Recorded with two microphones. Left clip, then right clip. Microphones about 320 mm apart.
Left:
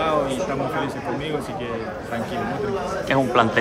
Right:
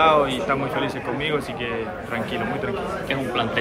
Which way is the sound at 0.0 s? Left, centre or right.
Centre.